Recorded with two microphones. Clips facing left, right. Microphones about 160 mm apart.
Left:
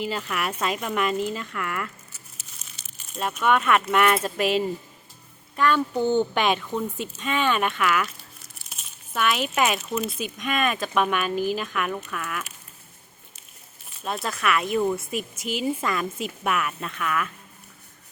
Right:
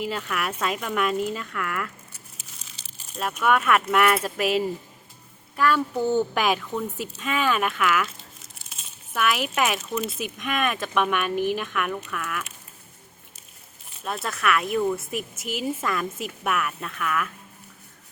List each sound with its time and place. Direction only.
0.0 s a woman's voice: centre (ahead or behind)
2.6 s crumpling: 35° right (ahead or behind)
3.2 s a woman's voice: 5° right (ahead or behind)
9.1 s a woman's voice: 5° right (ahead or behind)
14.0 s a woman's voice: centre (ahead or behind)